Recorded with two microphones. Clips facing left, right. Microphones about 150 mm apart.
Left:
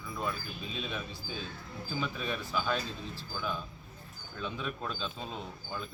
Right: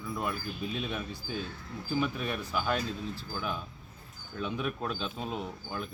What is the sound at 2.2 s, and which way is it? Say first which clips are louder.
Speech: right 1 dB; 15° right (ahead or behind).